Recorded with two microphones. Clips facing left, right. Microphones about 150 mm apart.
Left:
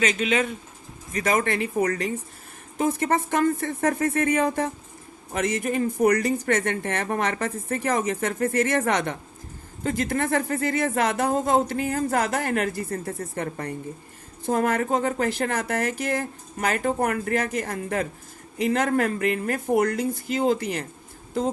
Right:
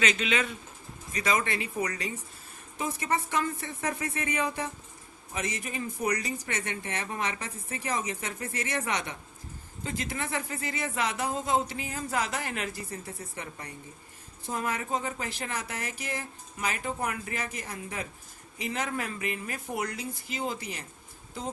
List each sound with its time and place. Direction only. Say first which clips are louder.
0.0 s speech: left 5 dB; 45° left (ahead or behind)